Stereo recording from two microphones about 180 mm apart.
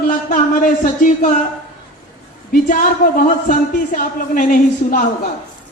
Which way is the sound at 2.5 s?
50° left (ahead or behind).